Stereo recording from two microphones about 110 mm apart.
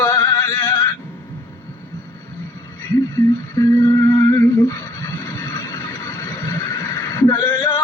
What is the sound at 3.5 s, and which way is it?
Humming, 30° left (ahead or behind).